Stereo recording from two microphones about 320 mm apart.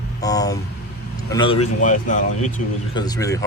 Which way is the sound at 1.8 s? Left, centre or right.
Left.